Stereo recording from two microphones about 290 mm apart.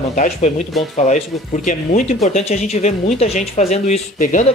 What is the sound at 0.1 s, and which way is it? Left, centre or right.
Speech, left.